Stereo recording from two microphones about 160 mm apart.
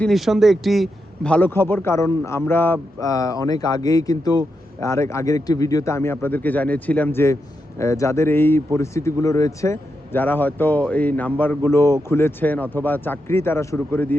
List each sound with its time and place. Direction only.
0.0 s a man's voice: centre (ahead or behind)